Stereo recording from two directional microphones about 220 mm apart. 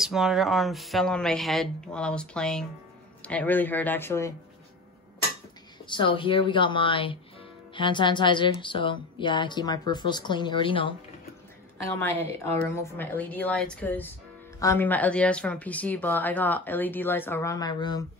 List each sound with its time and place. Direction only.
0.0 s speech: centre (ahead or behind)
5.9 s a woman's voice: 20° left (ahead or behind)
12.0 s speech: 10° left (ahead or behind)